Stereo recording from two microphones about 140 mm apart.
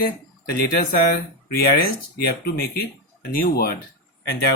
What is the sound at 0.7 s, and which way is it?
Speech, 90° left.